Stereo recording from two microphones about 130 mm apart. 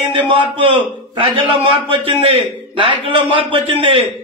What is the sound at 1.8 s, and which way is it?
A man's voice, 45° right (ahead or behind).